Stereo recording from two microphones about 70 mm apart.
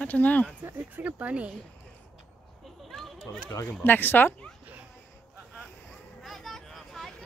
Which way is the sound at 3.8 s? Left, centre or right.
Left.